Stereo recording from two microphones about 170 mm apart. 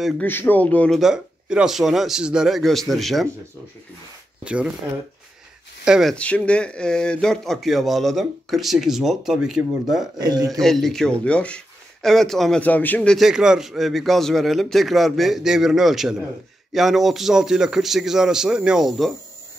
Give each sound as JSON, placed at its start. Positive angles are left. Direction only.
{"t": 0.2, "sound": "speech", "side_deg": 10}
{"t": 5.9, "sound": "speech", "side_deg": 0}
{"t": 10.1, "sound": "a man's voice", "side_deg": -25}
{"t": 10.5, "sound": "speech", "side_deg": 0}